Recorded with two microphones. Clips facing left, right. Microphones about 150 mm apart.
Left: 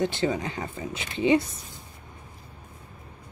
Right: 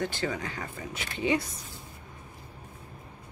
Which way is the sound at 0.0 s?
20° left (ahead or behind).